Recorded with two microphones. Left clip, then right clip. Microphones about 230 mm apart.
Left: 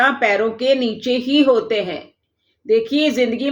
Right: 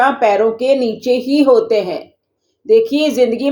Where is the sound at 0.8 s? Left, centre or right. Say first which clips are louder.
Right 5 dB; centre.